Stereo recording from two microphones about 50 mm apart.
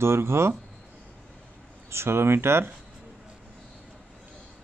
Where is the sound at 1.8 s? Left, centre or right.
Right.